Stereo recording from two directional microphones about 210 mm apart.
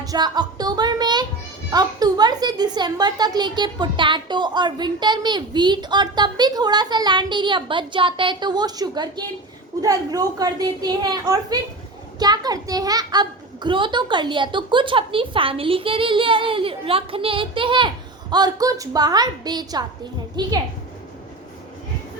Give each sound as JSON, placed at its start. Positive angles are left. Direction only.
{"t": 0.0, "sound": "a child's voice", "side_deg": -20}